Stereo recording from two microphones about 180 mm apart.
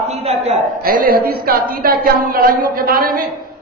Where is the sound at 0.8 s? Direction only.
55° right (ahead or behind).